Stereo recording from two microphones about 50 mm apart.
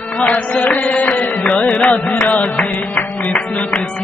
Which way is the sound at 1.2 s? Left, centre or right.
Left.